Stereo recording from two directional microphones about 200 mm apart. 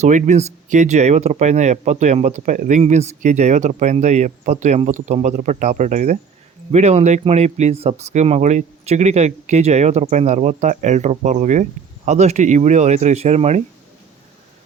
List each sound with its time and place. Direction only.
0.0 s speech: 35° right (ahead or behind)